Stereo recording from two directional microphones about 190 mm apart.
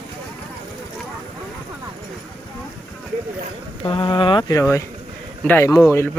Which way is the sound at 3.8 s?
25° left (ahead or behind).